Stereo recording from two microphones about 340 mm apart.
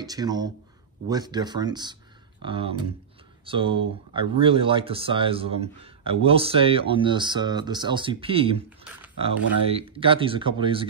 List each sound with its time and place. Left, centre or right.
0.0 s speech: centre
9.7 s speech: centre